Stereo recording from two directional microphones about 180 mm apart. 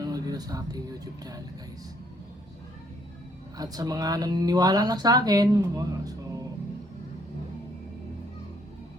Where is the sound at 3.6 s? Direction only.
20° right (ahead or behind).